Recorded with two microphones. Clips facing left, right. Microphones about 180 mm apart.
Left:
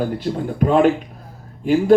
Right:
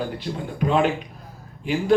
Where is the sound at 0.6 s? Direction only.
45° left (ahead or behind).